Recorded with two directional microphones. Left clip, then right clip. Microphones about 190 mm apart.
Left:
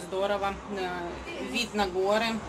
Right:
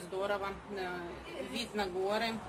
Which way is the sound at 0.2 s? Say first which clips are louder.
Left 7 dB; 15° left (ahead or behind).